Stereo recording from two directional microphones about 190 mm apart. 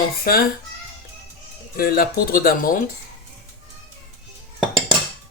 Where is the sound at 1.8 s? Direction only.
55° left (ahead or behind).